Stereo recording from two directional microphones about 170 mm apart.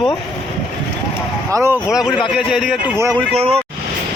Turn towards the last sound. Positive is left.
turn(degrees=-35)  # may be behind; listen again after turning